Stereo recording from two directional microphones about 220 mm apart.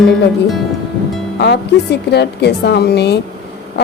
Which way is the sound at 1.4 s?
50° left (ahead or behind).